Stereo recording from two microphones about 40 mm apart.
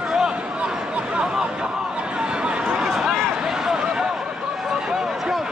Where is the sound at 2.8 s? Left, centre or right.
Centre.